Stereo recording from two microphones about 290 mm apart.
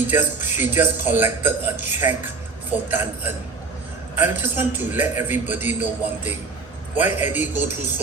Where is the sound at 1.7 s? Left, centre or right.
Left.